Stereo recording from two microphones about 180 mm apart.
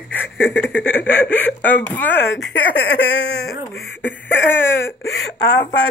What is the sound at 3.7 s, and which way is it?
Speech, 10° left (ahead or behind).